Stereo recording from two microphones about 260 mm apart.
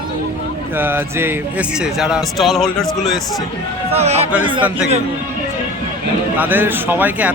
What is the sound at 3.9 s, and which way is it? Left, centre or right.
Speech, right.